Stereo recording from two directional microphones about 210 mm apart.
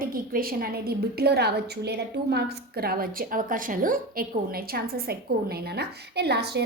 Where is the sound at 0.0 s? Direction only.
45° right (ahead or behind).